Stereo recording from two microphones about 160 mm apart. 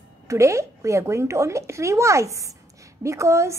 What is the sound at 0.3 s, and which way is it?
Speech, 20° right (ahead or behind).